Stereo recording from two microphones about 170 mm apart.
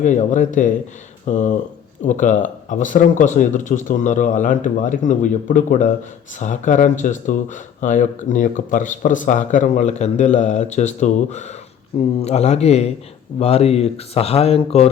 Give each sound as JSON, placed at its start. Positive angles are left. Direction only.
{"t": 0.0, "sound": "speech", "side_deg": 45}